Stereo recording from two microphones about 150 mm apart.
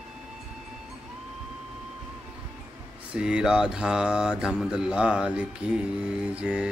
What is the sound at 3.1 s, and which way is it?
Speech, 5° right (ahead or behind).